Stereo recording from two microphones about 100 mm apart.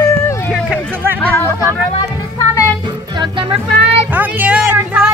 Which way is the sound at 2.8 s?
50° right (ahead or behind).